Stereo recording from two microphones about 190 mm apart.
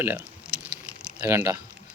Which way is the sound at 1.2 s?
15° right (ahead or behind).